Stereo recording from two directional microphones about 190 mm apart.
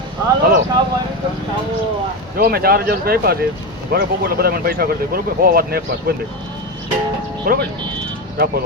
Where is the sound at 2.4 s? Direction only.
50° right (ahead or behind).